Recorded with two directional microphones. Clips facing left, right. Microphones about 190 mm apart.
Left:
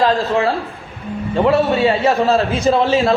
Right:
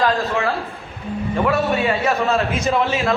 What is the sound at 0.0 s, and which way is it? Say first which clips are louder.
A man's voice: left 4 dB; 30° left (ahead or behind).